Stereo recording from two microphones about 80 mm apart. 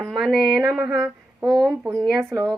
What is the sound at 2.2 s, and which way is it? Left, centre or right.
Speech, right.